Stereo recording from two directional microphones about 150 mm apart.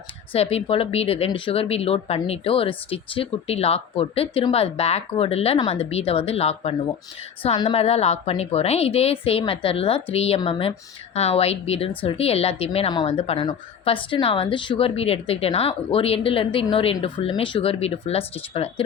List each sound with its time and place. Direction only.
0.3 s a woman's voice: 40° left (ahead or behind)